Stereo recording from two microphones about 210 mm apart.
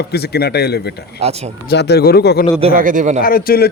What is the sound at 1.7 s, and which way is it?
Speech, 50° left (ahead or behind).